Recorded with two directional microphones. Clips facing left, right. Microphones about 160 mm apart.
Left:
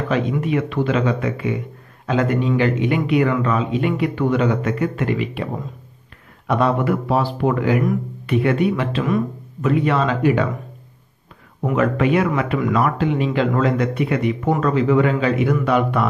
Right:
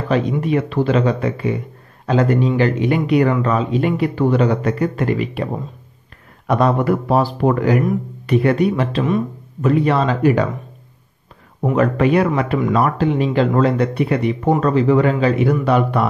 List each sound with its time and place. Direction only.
0.1 s speech: 35° right (ahead or behind)
11.7 s speech: 40° right (ahead or behind)